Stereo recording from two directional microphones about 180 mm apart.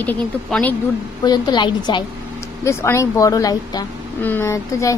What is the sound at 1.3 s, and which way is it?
Speech, 25° left (ahead or behind).